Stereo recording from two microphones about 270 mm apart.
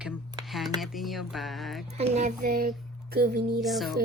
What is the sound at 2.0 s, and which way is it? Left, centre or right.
Speech, right.